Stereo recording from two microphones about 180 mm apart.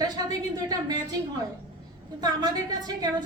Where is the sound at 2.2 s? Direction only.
20° right (ahead or behind).